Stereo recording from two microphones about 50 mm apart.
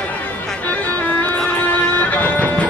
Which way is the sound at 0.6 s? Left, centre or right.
Left.